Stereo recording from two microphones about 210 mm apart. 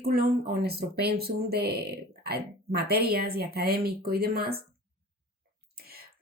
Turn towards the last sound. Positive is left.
turn(degrees=-45)  # may be behind; listen again after turning